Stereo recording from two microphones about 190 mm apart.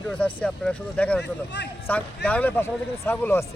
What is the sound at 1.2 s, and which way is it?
Speech, 65° left (ahead or behind).